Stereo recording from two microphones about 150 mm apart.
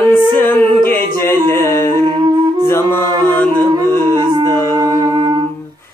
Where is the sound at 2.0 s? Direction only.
30° right (ahead or behind).